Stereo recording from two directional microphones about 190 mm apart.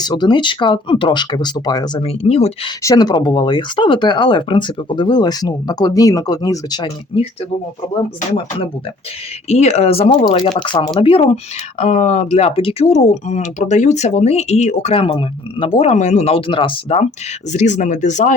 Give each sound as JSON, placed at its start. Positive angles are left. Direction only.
{"t": 0.0, "sound": "speech", "side_deg": 20}
{"t": 2.8, "sound": "speech", "side_deg": 20}
{"t": 9.5, "sound": "speech", "side_deg": 35}